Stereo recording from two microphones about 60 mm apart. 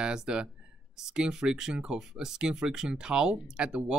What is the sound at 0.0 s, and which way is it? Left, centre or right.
Speech, centre.